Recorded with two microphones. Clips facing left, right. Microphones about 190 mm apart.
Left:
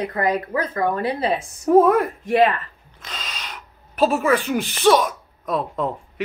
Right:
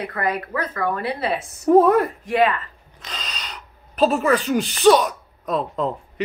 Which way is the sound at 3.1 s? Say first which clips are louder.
Even; centre (ahead or behind).